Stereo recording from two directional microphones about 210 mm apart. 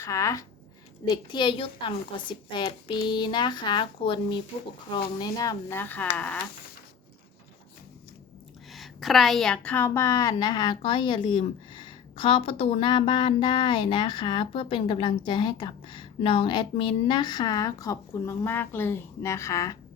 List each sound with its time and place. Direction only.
0.0 s a woman's voice: 15° left (ahead or behind)
8.7 s a woman's voice: centre (ahead or behind)